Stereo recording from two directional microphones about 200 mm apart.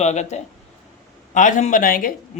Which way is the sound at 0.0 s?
35° left (ahead or behind).